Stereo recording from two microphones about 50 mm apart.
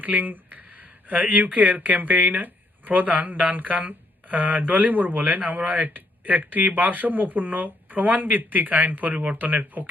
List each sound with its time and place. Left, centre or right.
0.0 s speech: right